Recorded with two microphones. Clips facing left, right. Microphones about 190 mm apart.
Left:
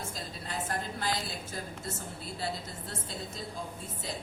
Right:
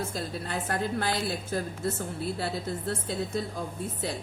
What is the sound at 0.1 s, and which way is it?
A woman's voice, 60° right (ahead or behind).